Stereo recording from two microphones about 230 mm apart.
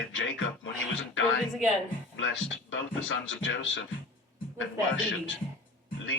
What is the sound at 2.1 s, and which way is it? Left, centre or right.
Speech, left.